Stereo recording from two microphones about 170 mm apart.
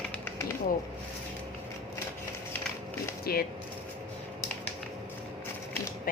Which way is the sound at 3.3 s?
65° left (ahead or behind).